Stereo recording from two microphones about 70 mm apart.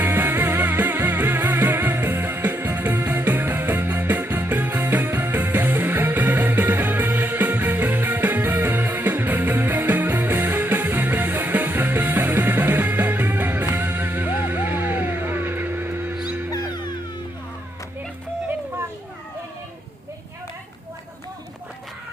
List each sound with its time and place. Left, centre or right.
0.0 s music: right
16.5 s music: left